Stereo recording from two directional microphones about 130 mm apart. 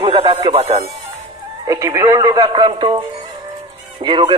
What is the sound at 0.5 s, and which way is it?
Speech, 50° right (ahead or behind).